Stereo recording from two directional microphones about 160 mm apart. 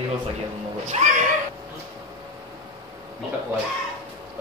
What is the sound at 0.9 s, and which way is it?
Speech, 50° right (ahead or behind).